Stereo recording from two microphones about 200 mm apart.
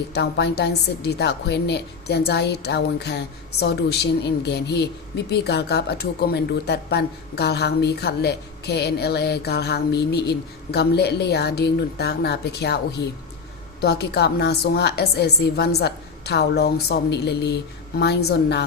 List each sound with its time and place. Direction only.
0.1 s a woman's voice: 55° left (ahead or behind)
13.8 s a woman's voice: 55° left (ahead or behind)